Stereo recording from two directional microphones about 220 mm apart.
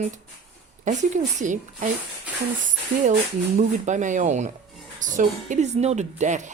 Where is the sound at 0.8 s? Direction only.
35° right (ahead or behind).